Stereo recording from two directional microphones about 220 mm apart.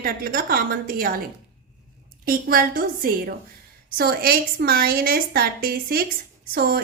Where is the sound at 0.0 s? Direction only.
40° right (ahead or behind).